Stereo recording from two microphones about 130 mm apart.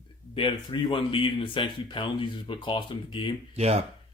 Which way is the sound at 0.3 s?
40° left (ahead or behind).